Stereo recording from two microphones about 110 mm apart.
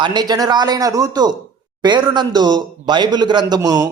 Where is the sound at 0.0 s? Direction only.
40° right (ahead or behind).